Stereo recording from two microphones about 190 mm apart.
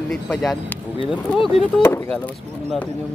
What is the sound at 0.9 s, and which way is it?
Speech, 25° left (ahead or behind).